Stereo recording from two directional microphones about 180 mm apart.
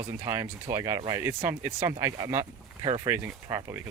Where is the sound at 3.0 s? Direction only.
10° right (ahead or behind).